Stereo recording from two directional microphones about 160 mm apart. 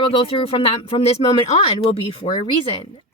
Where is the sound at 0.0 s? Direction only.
35° left (ahead or behind).